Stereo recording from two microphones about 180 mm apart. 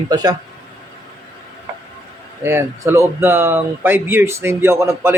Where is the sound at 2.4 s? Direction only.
15° right (ahead or behind).